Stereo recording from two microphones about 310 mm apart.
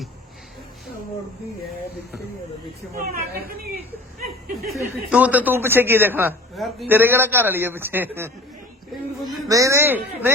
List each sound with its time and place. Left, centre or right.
2.9 s a woman's voice: right
5.1 s a man's voice: centre
9.5 s a man's voice: centre